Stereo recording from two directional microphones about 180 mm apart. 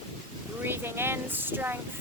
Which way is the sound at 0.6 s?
10° right (ahead or behind).